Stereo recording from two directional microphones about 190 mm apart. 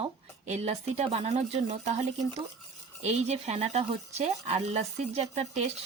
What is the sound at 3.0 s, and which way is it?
Speech, 35° right (ahead or behind).